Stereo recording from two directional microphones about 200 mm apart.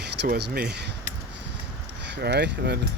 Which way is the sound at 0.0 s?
55° right (ahead or behind).